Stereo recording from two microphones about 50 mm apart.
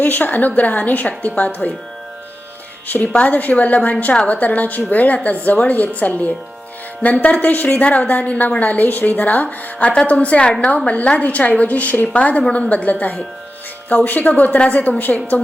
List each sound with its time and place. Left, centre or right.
0.0 s a woman's voice: left
2.8 s a woman's voice: left